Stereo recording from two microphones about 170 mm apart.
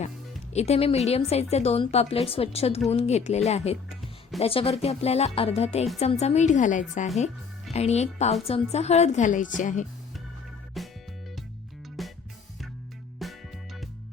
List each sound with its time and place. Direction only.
0.5 s a woman's voice: 40° left (ahead or behind)
3.8 s music: centre (ahead or behind)
4.4 s a woman's voice: 35° left (ahead or behind)
10.8 s music: centre (ahead or behind)
12.0 s music: centre (ahead or behind)
13.2 s music: centre (ahead or behind)